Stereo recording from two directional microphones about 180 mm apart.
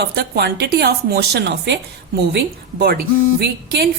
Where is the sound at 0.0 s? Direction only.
60° right (ahead or behind).